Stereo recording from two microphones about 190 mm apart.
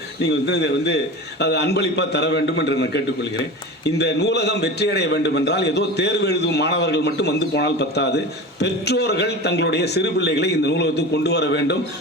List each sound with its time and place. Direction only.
0.2 s a man's voice: 65° left (ahead or behind)